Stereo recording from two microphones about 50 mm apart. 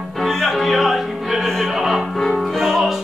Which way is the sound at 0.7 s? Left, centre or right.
Centre.